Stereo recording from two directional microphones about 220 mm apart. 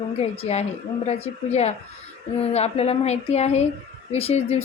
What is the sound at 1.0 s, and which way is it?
A woman's voice, 30° left (ahead or behind).